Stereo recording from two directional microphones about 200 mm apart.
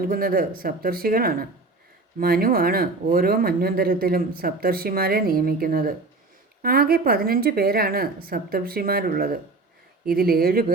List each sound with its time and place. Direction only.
0.0 s speech: 45° right (ahead or behind)